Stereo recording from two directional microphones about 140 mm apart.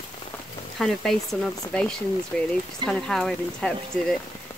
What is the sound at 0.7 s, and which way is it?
Speech, centre (ahead or behind).